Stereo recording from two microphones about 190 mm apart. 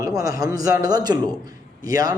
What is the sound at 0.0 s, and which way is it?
Speech, 20° right (ahead or behind).